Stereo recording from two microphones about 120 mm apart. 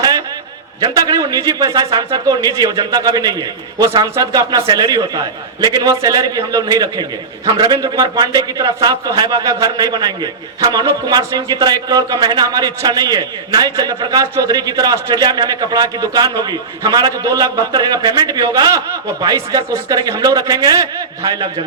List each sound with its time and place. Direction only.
0.8 s a man's voice: 35° right (ahead or behind)